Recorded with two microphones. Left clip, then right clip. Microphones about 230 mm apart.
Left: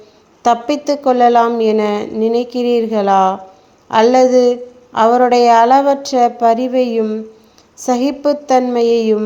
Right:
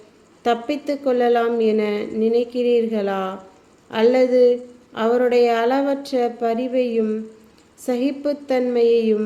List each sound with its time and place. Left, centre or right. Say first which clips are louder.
0.4 s a woman's voice: left 7 dB; centre